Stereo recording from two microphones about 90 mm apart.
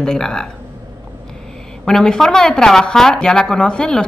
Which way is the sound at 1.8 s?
5° left (ahead or behind).